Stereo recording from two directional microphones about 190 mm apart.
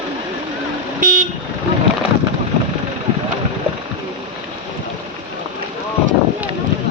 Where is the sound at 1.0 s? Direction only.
45° right (ahead or behind).